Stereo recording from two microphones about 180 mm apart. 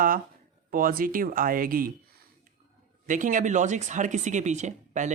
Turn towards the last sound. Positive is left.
turn(degrees=-40)  # may be behind; listen again after turning